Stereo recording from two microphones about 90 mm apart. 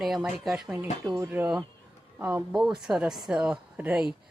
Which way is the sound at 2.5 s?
5° right (ahead or behind).